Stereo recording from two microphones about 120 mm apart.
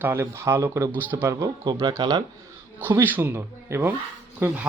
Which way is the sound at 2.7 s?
15° right (ahead or behind).